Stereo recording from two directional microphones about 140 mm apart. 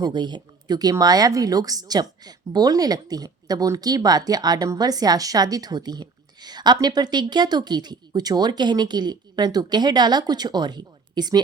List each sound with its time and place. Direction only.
0.0 s speech: 30° right (ahead or behind)